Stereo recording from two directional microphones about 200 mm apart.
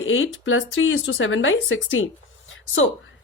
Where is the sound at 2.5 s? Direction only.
75° left (ahead or behind).